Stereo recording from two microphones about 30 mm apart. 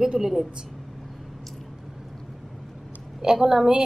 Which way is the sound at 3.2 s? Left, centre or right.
Right.